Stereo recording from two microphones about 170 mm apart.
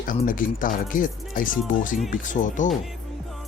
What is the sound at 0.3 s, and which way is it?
Speech, 55° left (ahead or behind).